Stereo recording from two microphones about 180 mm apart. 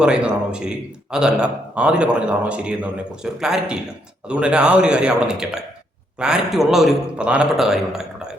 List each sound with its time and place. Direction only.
0.0 s a man's voice: 5° right (ahead or behind)